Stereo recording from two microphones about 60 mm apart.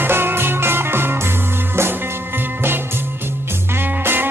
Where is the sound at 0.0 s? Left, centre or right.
Right.